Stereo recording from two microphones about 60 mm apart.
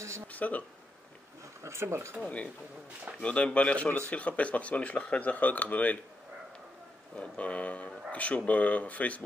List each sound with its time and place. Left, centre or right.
0.3 s speech: left
1.6 s speech: right
2.2 s speech: centre
7.2 s speech: left